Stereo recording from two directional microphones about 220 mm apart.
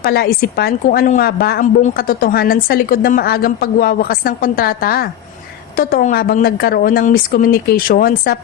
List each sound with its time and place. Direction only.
0.0 s a woman's voice: 45° left (ahead or behind)